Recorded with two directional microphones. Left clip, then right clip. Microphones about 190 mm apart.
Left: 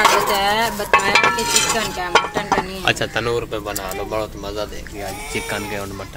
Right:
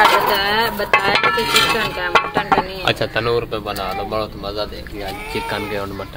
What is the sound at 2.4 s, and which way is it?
Speech, 5° right (ahead or behind).